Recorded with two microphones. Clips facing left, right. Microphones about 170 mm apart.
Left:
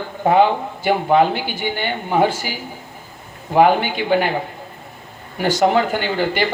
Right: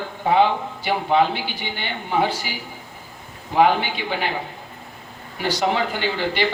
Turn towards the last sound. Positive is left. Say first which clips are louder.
# left 3 dB
turn(degrees=50)  # may be behind; listen again after turning